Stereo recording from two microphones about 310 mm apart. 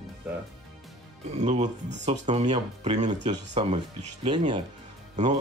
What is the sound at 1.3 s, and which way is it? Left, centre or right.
Speech, right.